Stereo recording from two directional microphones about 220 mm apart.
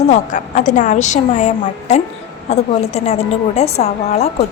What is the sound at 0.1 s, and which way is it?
A woman's voice, 35° left (ahead or behind).